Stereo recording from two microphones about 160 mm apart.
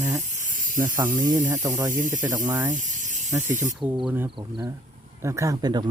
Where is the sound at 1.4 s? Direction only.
50° right (ahead or behind).